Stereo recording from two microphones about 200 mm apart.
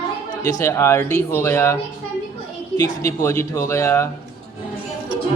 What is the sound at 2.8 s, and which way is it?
Speech, 15° left (ahead or behind).